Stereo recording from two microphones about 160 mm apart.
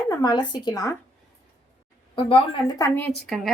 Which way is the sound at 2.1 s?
35° left (ahead or behind).